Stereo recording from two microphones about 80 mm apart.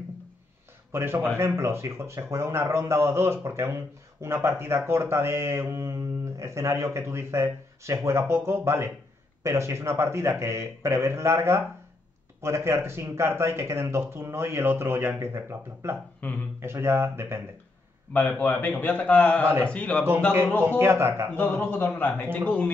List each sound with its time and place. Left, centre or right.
0.9 s speech: right
16.2 s a man's voice: left
16.5 s speech: right
18.1 s a man's voice: left
20.6 s speech: right
21.4 s a man's voice: left